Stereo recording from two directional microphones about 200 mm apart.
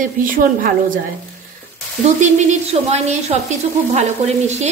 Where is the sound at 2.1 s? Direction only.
35° right (ahead or behind).